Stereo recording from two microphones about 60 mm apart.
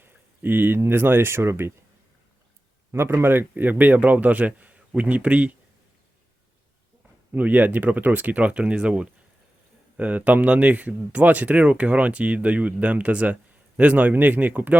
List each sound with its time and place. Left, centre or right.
0.0 s a sound: right
0.8 s speech: right
2.9 s speech: right
7.3 s speech: right